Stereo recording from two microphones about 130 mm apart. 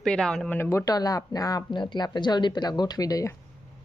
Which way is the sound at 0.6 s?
20° left (ahead or behind).